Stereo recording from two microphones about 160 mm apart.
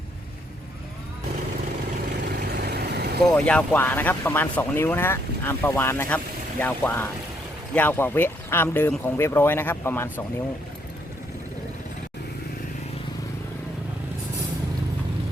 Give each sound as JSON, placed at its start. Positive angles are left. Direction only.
{"t": 2.4, "sound": "vehicle", "side_deg": -85}
{"t": 3.2, "sound": "speech", "side_deg": 5}